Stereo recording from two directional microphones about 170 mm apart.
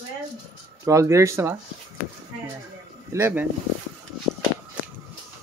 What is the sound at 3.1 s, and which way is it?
Speech, 15° right (ahead or behind).